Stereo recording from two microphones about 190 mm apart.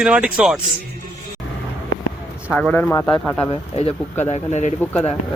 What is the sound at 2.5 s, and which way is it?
Speech, 5° left (ahead or behind).